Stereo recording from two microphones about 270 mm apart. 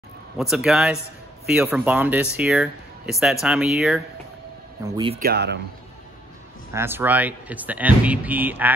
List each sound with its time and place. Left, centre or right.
0.4 s speech: centre
4.8 s speech: centre
5.2 s speech: right
6.7 s speech: centre